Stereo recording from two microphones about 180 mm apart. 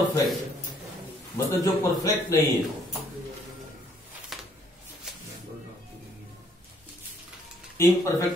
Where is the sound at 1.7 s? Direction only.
20° left (ahead or behind).